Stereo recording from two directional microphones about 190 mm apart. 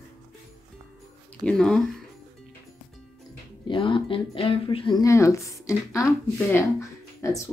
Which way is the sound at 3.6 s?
25° left (ahead or behind).